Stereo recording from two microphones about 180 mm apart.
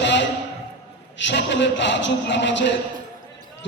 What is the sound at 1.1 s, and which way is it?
A man's voice, 80° left.